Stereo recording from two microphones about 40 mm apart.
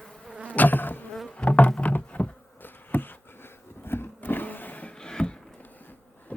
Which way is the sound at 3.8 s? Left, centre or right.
Left.